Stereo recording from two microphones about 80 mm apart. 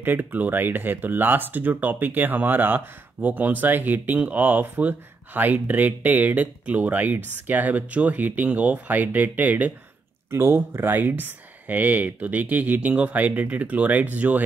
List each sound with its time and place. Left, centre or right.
0.0 s speech: right
10.3 s speech: right